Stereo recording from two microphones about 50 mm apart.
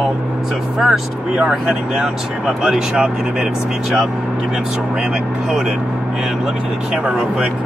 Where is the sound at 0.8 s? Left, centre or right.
Centre.